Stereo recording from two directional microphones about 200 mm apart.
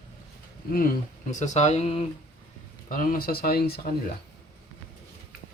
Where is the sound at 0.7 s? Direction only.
45° left (ahead or behind); by 2.1 s 30° left (ahead or behind).